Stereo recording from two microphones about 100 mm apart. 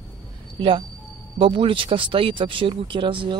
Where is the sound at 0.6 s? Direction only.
55° right (ahead or behind).